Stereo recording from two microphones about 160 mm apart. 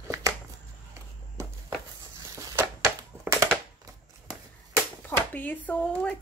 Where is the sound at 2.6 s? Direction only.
15° right (ahead or behind).